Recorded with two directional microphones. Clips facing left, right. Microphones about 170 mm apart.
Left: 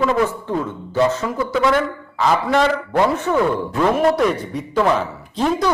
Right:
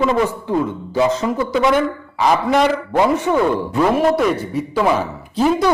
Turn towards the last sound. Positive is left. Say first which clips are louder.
# right 3 dB
turn(degrees=-5)  # may be behind; listen again after turning